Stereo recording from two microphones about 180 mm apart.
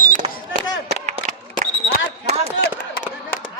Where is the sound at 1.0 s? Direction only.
40° right (ahead or behind).